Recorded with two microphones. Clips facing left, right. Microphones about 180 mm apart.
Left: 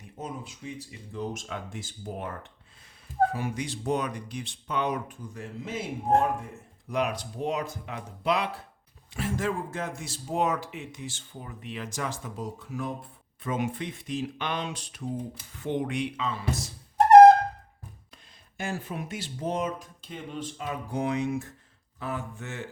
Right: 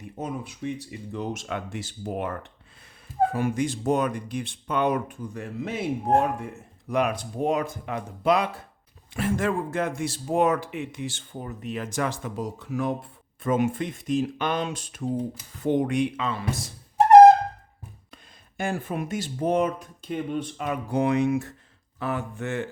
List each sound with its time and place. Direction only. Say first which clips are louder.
0.2 s speech: right 6 dB; 65° right (ahead or behind)
3.3 s speech: right 7 dB; 50° right (ahead or behind)
9.1 s speech: right 4 dB; 60° right (ahead or behind)
13.4 s speech: right 6 dB; 50° right (ahead or behind)
16.2 s speech: right 2 dB; 60° right (ahead or behind)
18.5 s speech: right 5 dB; 55° right (ahead or behind)